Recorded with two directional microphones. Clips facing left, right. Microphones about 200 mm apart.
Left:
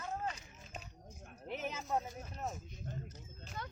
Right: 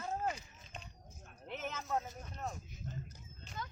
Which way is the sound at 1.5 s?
10° left (ahead or behind).